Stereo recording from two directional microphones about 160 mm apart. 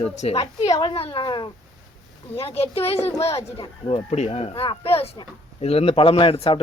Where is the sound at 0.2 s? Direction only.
40° left (ahead or behind).